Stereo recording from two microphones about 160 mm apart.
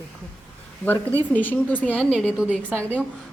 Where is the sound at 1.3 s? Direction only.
10° left (ahead or behind).